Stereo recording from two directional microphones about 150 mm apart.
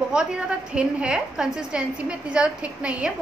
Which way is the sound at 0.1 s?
5° right (ahead or behind).